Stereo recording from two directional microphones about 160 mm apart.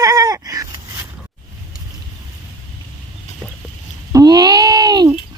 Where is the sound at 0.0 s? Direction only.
20° right (ahead or behind).